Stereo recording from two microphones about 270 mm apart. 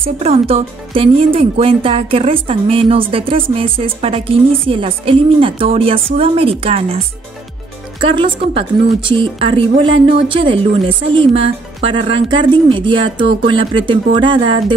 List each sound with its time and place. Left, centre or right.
0.0 s a woman's voice: right
8.0 s a woman's voice: centre